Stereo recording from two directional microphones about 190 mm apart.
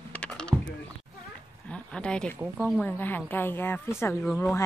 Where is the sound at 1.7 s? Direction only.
5° left (ahead or behind).